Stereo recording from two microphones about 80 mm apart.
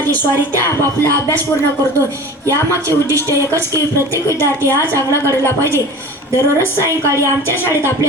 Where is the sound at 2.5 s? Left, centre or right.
Right.